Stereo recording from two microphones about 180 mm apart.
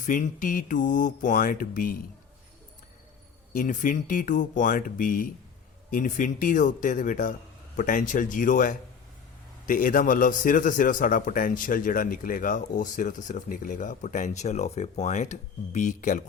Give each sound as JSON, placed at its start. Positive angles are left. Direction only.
{"t": 0.0, "sound": "a man's voice", "side_deg": 45}
{"t": 3.5, "sound": "a man's voice", "side_deg": 45}